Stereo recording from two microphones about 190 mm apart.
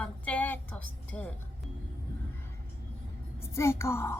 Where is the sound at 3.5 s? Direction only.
15° left (ahead or behind).